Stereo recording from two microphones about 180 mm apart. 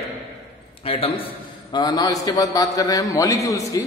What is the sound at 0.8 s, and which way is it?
A man's voice, 30° left (ahead or behind).